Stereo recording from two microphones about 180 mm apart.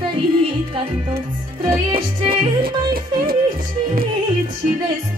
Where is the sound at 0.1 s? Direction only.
30° right (ahead or behind).